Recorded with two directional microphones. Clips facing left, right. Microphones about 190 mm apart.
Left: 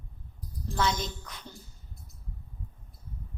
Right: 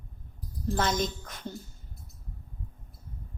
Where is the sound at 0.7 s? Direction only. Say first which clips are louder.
Right 1 dB; 50° right (ahead or behind).